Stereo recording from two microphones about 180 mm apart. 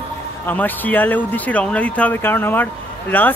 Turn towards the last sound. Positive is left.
turn(degrees=10)  # may be behind; listen again after turning